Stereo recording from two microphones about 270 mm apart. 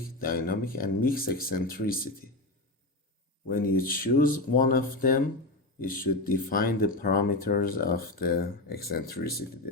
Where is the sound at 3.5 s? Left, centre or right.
Left.